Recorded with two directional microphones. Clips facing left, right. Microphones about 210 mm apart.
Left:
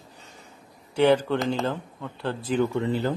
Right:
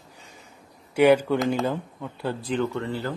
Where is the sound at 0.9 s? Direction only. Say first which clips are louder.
Right 2 dB; 10° right (ahead or behind).